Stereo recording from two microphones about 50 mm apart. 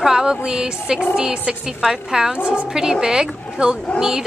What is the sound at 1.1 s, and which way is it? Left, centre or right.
Speech, centre.